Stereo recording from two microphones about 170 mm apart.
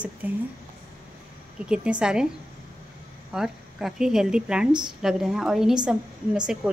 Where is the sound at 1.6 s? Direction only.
5° right (ahead or behind).